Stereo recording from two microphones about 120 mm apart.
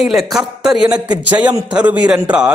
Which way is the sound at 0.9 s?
35° right (ahead or behind).